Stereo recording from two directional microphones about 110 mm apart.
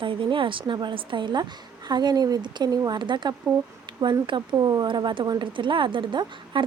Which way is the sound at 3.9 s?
45° right (ahead or behind).